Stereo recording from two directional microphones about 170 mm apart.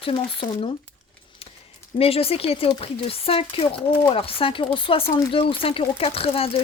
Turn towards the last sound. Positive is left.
turn(degrees=35)  # may be behind; listen again after turning